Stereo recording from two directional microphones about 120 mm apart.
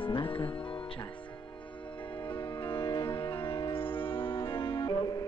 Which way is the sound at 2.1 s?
45° left (ahead or behind).